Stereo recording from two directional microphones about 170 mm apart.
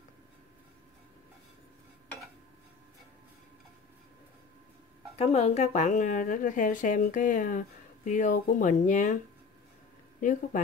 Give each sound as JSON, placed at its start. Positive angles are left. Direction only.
{"t": 5.1, "sound": "a woman's voice", "side_deg": 35}